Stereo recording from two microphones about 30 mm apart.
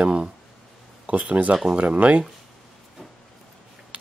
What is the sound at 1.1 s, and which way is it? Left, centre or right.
Speech, right.